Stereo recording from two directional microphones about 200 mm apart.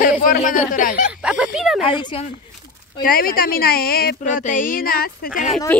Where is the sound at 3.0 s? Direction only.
45° left (ahead or behind).